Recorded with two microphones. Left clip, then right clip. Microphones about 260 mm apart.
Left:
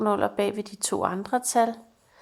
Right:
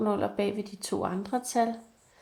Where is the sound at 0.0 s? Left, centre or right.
Left.